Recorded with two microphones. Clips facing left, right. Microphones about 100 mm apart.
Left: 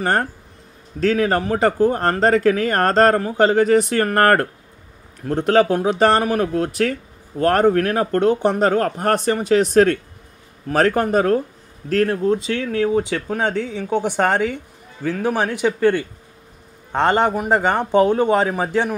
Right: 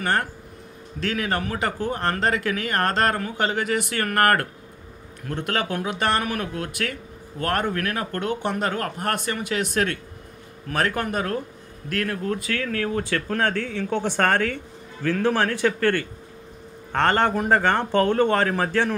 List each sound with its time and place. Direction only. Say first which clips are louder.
0.0 s speech: left 4 dB; 35° left (ahead or behind)
12.2 s speech: left 7 dB; 20° left (ahead or behind)